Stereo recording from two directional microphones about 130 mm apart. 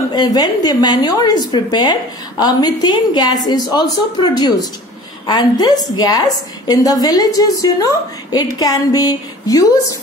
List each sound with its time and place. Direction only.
0.1 s a woman's voice: 30° left (ahead or behind)